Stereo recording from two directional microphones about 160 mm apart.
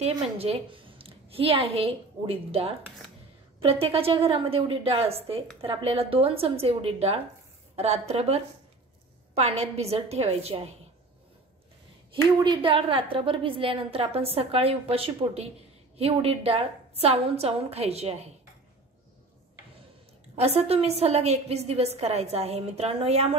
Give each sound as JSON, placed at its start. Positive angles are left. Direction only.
{"t": 0.0, "sound": "a woman's voice", "side_deg": -40}
{"t": 12.1, "sound": "a woman's voice", "side_deg": -30}
{"t": 20.3, "sound": "a woman's voice", "side_deg": -40}